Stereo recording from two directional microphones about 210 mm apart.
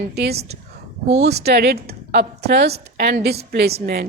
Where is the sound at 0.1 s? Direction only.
50° right (ahead or behind).